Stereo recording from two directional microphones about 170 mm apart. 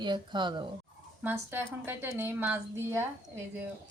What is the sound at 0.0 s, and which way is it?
Speech, 25° right (ahead or behind).